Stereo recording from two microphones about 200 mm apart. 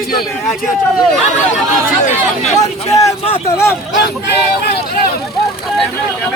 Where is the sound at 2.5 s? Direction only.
15° left (ahead or behind).